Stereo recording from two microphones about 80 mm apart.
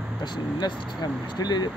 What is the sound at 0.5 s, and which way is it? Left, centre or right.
Speech, left.